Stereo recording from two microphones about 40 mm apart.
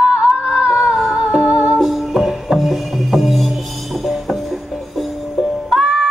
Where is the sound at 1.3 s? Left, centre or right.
Right.